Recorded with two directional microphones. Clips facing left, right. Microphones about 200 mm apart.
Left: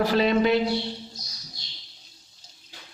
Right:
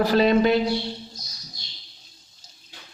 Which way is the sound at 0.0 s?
40° right (ahead or behind).